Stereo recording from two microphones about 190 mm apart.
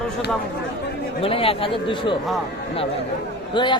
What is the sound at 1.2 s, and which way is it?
Speech, 30° left (ahead or behind).